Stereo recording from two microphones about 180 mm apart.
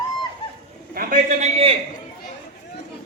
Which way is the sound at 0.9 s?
45° right (ahead or behind).